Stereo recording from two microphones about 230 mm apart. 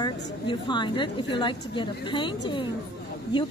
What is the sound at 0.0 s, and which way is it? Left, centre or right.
A woman's voice, centre.